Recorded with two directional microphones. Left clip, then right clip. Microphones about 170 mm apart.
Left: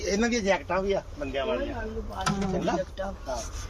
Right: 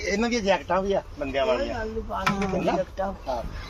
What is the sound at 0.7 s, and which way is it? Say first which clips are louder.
Speech: right 3 dB; 25° right (ahead or behind).